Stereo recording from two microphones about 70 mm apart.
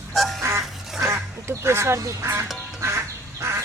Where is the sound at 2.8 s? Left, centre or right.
Right.